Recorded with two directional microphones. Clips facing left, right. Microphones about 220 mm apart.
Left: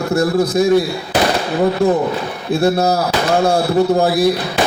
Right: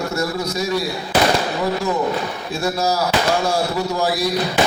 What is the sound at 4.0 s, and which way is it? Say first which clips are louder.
Speech: left 7 dB; 55° left (ahead or behind).